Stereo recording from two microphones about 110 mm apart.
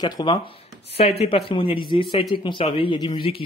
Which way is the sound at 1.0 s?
65° left (ahead or behind).